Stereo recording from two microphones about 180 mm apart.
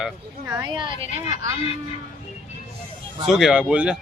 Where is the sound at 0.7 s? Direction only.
25° right (ahead or behind).